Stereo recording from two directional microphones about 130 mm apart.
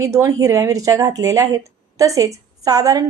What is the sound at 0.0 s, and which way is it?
Speech, 25° right (ahead or behind).